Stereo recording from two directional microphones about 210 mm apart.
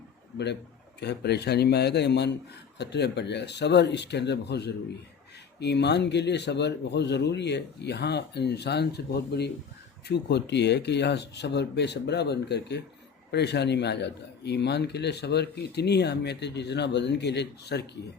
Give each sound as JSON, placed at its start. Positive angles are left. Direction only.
{"t": 0.9, "sound": "a man's voice", "side_deg": 50}